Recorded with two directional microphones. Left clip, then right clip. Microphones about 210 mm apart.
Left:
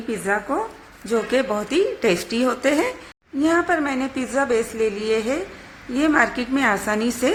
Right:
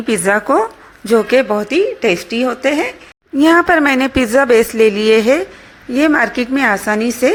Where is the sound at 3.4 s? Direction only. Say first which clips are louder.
Right 9 dB; 40° right (ahead or behind).